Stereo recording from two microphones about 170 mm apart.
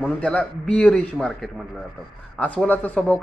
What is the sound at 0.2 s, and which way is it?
A woman's voice, 10° left (ahead or behind).